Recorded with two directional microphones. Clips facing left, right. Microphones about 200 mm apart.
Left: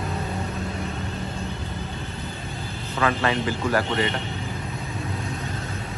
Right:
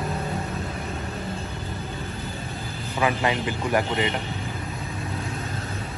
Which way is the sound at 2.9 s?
15° right (ahead or behind).